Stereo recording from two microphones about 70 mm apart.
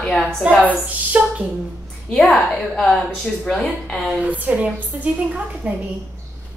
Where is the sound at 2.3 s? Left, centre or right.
Centre.